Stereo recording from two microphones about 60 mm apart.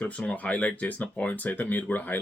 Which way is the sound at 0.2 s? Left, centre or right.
Left.